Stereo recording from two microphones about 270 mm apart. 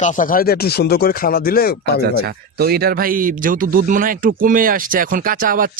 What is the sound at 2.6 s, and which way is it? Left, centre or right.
Speech, right.